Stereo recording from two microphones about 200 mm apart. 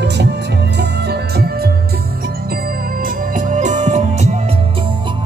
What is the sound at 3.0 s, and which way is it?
Music, 40° right (ahead or behind).